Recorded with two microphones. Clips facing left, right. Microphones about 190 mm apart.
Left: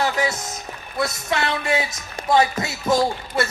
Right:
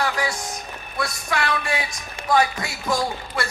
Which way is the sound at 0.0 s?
25° left (ahead or behind).